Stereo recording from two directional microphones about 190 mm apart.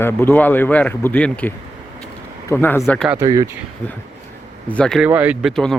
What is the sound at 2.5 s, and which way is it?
Speech, 10° left (ahead or behind).